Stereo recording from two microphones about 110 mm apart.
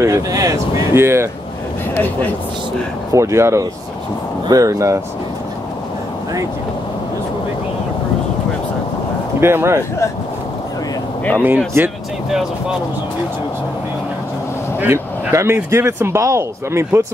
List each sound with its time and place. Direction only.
0.0 s speech: 30° right (ahead or behind)
3.1 s speech: 25° right (ahead or behind)
9.4 s speech: 20° right (ahead or behind)
11.3 s speech: 15° right (ahead or behind)
14.8 s speech: 20° right (ahead or behind)